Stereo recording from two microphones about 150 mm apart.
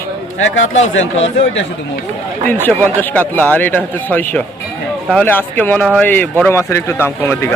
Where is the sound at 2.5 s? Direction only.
15° left (ahead or behind).